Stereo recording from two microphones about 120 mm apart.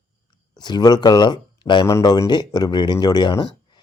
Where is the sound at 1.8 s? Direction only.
30° left (ahead or behind).